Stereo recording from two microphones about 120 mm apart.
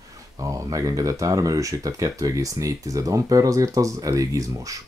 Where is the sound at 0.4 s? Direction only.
30° right (ahead or behind).